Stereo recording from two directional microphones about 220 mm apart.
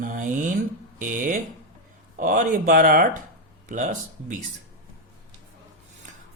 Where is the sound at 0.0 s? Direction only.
35° right (ahead or behind).